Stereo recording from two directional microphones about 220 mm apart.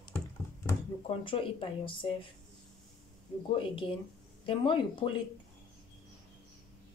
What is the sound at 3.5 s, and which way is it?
Speech, 25° left (ahead or behind).